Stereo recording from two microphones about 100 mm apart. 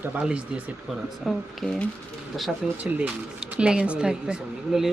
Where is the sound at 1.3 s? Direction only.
Centre (ahead or behind).